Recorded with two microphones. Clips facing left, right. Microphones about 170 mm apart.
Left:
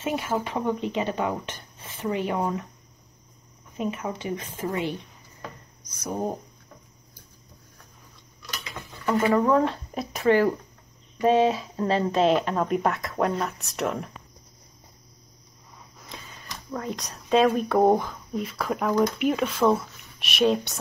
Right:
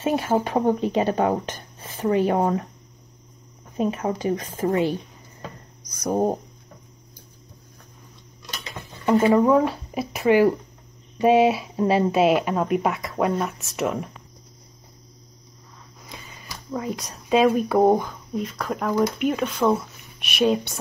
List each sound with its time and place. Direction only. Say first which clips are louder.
0.0 s speech: right 5 dB; 40° right (ahead or behind)
3.7 s speech: right 6 dB; 35° right (ahead or behind)
8.5 s a sound: right 1 dB; 25° right (ahead or behind)
9.6 s speech: right 2 dB; 5° right (ahead or behind)
16.1 s speech: right 1 dB; 5° right (ahead or behind)